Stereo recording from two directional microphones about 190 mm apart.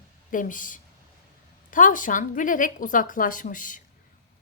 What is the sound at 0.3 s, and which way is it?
Speech, 45° left (ahead or behind).